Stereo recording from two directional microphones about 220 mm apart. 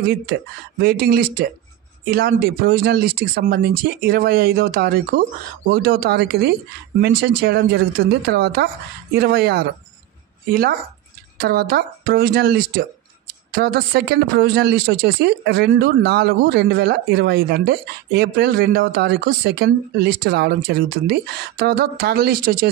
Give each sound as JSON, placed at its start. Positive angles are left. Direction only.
{"t": 0.7, "sound": "speech", "side_deg": -45}